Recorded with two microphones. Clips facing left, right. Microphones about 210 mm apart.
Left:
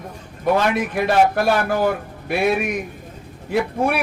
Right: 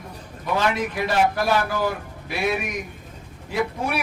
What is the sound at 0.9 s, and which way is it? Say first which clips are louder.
Speech: left 5 dB; 55° left (ahead or behind).